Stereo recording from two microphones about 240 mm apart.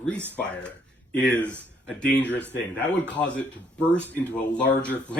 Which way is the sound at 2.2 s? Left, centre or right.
Left.